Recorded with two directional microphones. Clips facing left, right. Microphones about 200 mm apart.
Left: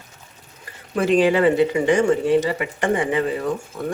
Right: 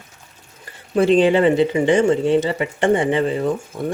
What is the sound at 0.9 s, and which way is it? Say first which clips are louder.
Speech: right 3 dB; 25° right (ahead or behind).